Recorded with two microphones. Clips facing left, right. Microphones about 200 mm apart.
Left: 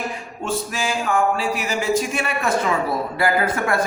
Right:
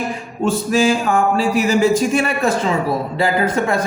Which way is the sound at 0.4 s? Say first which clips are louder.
Right 9 dB; 30° right (ahead or behind).